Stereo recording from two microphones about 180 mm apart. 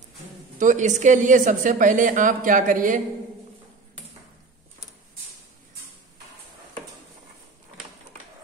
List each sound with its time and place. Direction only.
0.6 s a woman's voice: 45° right (ahead or behind)